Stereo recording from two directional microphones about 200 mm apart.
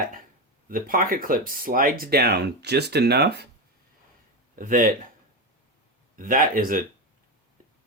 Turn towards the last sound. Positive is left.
turn(degrees=-45)  # may be behind; listen again after turning